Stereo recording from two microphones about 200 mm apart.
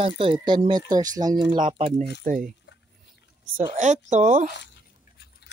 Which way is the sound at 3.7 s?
35° right (ahead or behind).